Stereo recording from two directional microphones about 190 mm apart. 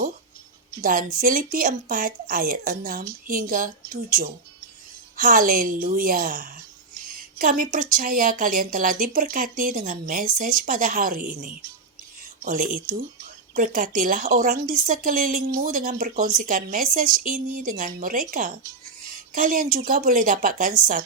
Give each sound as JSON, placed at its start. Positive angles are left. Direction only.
{"t": 0.8, "sound": "a woman's voice", "side_deg": -45}
{"t": 5.1, "sound": "a woman's voice", "side_deg": -45}
{"t": 12.4, "sound": "a woman's voice", "side_deg": -45}